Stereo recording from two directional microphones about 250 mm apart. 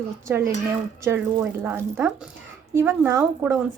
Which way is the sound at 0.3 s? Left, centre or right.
Centre.